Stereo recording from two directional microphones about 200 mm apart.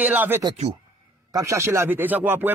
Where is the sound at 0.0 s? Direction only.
10° right (ahead or behind).